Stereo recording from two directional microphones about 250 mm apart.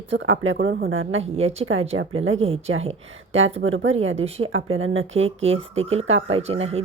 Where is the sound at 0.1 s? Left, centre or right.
Right.